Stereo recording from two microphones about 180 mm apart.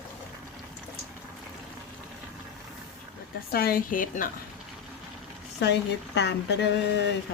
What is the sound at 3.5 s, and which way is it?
Speech, 55° left (ahead or behind).